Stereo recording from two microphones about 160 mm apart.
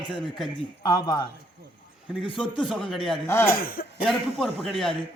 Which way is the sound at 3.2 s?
15° left (ahead or behind).